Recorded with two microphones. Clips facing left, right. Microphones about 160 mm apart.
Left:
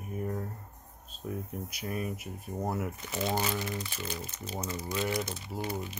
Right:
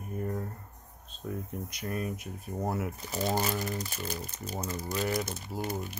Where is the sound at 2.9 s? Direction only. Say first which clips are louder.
Right 1 dB; 35° right (ahead or behind).